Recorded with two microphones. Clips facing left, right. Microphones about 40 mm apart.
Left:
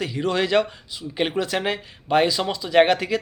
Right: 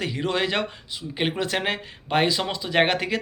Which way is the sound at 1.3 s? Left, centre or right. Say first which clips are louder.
Right 1 dB; right.